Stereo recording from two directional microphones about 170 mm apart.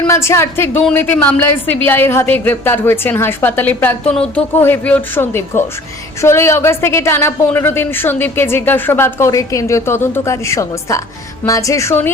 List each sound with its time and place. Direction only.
0.0 s a woman's voice: 15° left (ahead or behind)